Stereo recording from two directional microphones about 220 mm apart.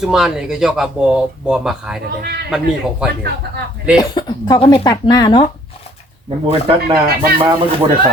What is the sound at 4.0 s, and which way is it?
Speech, 20° left (ahead or behind).